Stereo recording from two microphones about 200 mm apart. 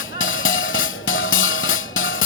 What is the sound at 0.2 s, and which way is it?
Music, 80° left.